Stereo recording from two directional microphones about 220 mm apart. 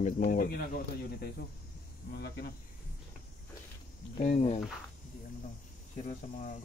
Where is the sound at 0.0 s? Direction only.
35° left (ahead or behind).